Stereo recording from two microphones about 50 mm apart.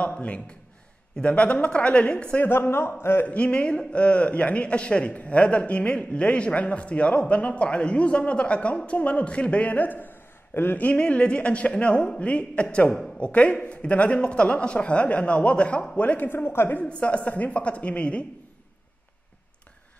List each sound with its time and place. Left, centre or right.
0.0 s a man's voice: left
2.4 s a man's voice: left
3.3 s a man's voice: left
10.8 s a man's voice: left
16.3 s a man's voice: left
17.0 s a man's voice: left